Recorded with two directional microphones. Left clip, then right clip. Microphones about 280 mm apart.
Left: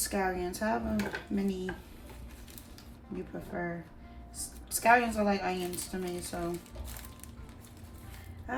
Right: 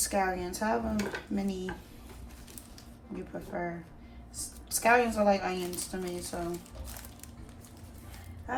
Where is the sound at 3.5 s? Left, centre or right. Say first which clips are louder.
Right 1 dB; centre.